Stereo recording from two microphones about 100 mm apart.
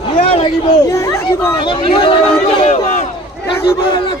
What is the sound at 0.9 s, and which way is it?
Speech, 25° left (ahead or behind).